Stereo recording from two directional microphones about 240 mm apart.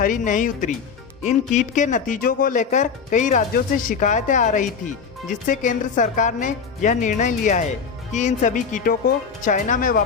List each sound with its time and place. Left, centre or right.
0.0 s speech: left